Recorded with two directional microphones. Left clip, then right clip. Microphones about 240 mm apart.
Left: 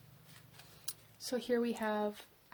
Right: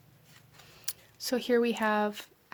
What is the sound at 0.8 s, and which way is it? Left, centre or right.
Speech, right.